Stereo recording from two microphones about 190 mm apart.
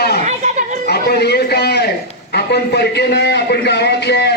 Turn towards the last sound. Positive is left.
turn(degrees=60)  # may be behind; listen again after turning